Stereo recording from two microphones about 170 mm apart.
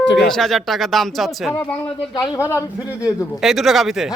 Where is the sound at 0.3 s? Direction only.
Centre (ahead or behind).